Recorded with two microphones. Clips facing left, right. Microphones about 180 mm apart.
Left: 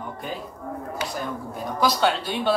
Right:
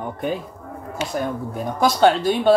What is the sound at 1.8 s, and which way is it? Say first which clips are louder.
Speech: right 6 dB; 45° right (ahead or behind).